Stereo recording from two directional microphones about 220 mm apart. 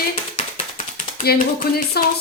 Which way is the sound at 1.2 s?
40° left (ahead or behind).